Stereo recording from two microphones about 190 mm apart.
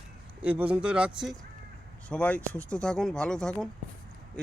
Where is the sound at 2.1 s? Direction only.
5° left (ahead or behind).